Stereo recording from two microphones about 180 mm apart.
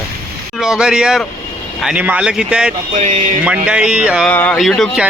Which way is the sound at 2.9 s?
40° right (ahead or behind).